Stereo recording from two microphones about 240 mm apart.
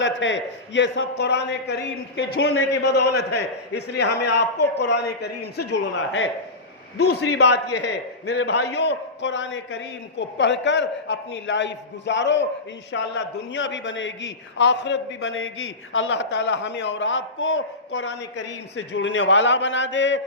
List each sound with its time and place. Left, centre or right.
0.0 s a man's voice: left
7.3 s a man's voice: left